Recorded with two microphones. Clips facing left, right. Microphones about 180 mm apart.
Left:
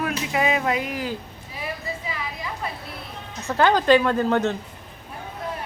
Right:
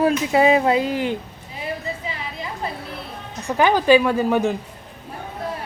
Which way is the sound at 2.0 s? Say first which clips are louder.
Right 1 dB; 30° right (ahead or behind).